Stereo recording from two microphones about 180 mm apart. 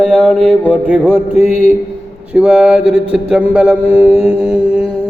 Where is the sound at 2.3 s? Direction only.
5° right (ahead or behind).